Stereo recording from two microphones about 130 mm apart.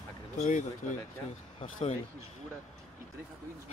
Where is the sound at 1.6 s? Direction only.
60° left (ahead or behind).